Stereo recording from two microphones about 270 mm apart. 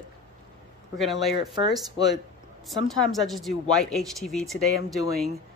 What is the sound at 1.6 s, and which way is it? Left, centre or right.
Speech, centre.